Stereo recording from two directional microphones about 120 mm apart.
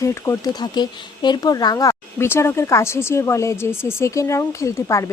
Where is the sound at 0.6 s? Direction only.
35° left (ahead or behind).